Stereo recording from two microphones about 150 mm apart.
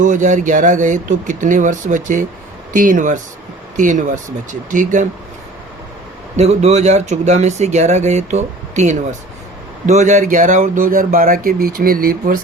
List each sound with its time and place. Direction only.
0.0 s speech: 55° right (ahead or behind)
6.3 s speech: 45° right (ahead or behind); by 12.4 s 70° right (ahead or behind)